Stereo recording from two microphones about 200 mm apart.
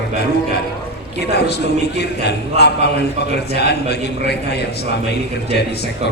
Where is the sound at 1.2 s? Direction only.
55° left (ahead or behind).